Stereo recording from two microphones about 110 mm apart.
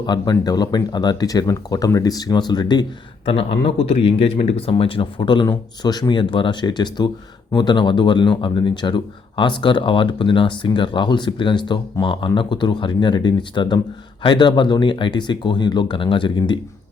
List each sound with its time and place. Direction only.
0.0 s speech: 40° left (ahead or behind)
3.2 s speech: 55° left (ahead or behind)